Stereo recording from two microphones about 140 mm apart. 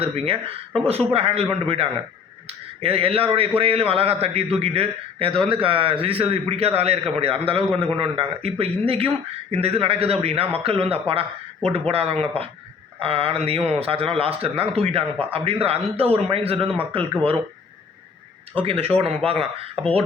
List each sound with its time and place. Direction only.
0.0 s speech: 45° right (ahead or behind)
18.6 s speech: 45° right (ahead or behind)